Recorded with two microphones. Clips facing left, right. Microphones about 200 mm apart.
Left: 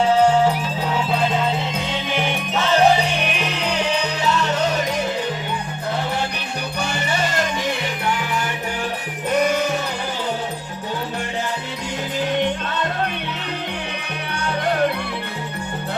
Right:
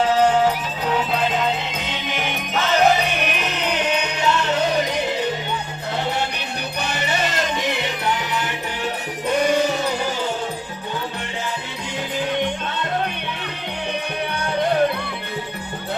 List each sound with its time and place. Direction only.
0.0 s music: 30° left (ahead or behind)
2.6 s music: 30° left (ahead or behind)